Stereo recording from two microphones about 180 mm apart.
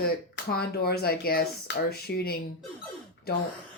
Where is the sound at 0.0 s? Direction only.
55° left (ahead or behind).